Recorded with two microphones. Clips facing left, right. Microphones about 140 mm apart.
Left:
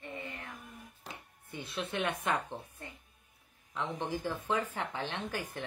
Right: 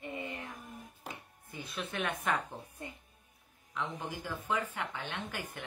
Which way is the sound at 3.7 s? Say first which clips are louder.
Left 3 dB; 30° left (ahead or behind).